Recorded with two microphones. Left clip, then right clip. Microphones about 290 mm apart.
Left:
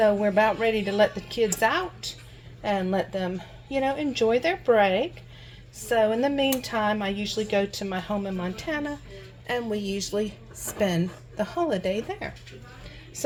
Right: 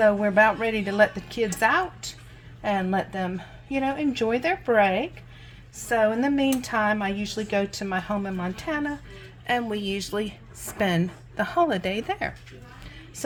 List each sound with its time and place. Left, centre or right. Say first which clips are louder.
0.0 s a woman's voice: right 2 dB; right